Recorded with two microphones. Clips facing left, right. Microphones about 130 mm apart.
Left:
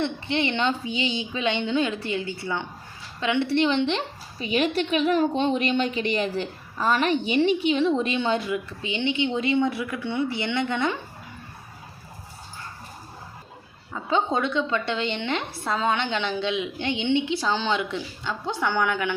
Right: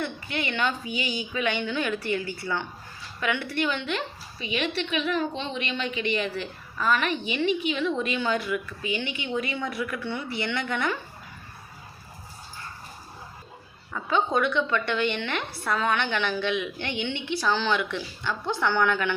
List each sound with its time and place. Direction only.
0.0 s a woman's voice: 25° left (ahead or behind)
13.9 s a woman's voice: 25° left (ahead or behind)